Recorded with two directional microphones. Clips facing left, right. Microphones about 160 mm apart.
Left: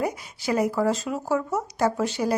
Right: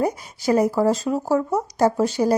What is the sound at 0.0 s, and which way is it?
Speech, 40° right (ahead or behind).